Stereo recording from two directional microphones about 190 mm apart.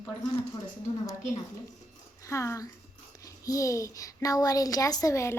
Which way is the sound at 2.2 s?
15° left (ahead or behind).